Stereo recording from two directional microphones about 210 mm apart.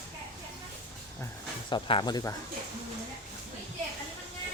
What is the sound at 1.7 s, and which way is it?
Speech, 20° left (ahead or behind).